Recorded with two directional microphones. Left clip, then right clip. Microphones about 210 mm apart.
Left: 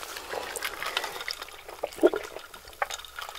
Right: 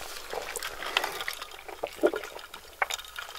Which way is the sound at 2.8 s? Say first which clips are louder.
Right 1 dB; 40° right (ahead or behind).